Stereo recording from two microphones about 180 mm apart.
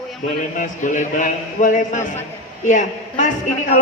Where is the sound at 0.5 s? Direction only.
45° left (ahead or behind).